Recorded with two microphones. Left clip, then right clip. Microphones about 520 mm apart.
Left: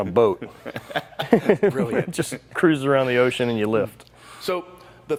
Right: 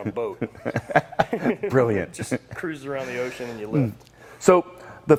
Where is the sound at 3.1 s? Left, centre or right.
Left.